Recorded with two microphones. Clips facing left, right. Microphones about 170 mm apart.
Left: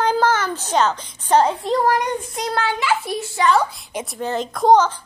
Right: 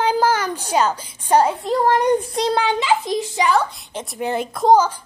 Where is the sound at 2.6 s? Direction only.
20° right (ahead or behind).